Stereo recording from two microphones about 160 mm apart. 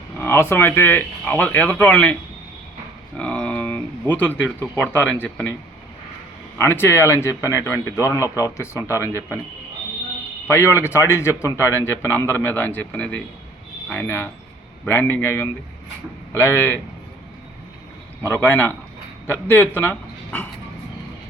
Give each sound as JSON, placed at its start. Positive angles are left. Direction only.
{"t": 0.2, "sound": "a man's voice", "side_deg": 15}
{"t": 3.2, "sound": "speech", "side_deg": 5}
{"t": 6.6, "sound": "a man's voice", "side_deg": 15}
{"t": 10.4, "sound": "a man's voice", "side_deg": 15}
{"t": 18.2, "sound": "a man's voice", "side_deg": 15}